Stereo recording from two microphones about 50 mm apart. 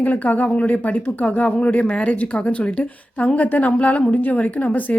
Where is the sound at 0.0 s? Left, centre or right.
Left.